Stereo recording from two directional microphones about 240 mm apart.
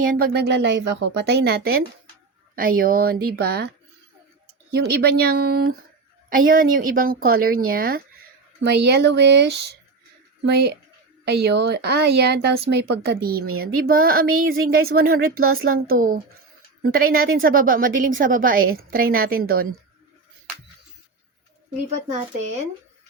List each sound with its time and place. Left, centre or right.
0.0 s a woman's voice: right